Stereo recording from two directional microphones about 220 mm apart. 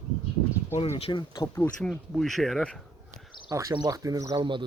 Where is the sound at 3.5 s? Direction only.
15° right (ahead or behind).